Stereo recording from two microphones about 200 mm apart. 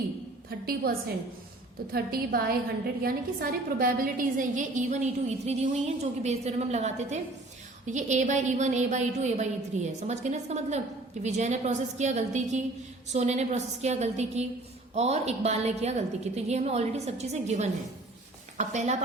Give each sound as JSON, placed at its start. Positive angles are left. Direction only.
{"t": 0.6, "sound": "a woman's voice", "side_deg": -50}